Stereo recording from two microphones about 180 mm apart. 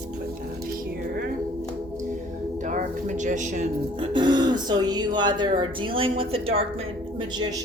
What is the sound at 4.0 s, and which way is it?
Speech, 25° right (ahead or behind).